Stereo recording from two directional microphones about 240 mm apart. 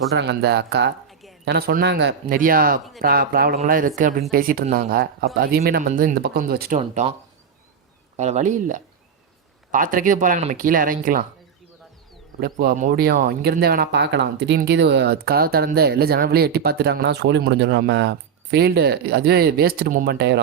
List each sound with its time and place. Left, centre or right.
0.1 s speech: right
1.0 s a sound: centre
1.5 s speech: right
8.1 s speech: right
12.4 s speech: right